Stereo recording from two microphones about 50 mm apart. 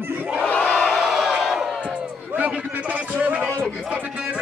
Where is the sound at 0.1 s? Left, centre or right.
Right.